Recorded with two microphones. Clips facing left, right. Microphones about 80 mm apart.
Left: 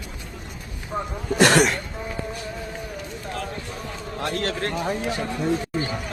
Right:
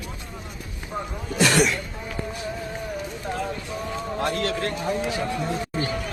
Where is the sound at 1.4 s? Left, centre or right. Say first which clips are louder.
Left 3 dB; left.